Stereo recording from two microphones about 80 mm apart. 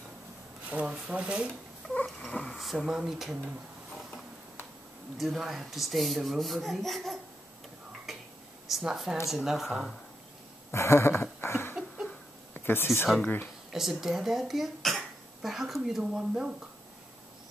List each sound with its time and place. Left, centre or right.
0.7 s speech: centre
2.0 s speech: centre
8.6 s speech: centre
10.7 s a sound: left
12.5 s speech: left
13.7 s a sound: centre
14.0 s speech: centre